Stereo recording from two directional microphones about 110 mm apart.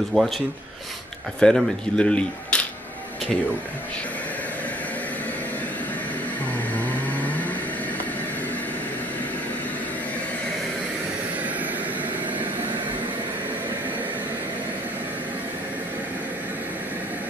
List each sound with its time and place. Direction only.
0.1 s speech: centre (ahead or behind)
1.4 s speech: 10° left (ahead or behind)
6.7 s vehicle: 15° left (ahead or behind)